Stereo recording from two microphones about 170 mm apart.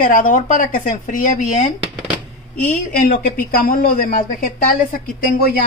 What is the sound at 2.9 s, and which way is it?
Speech, 55° left (ahead or behind).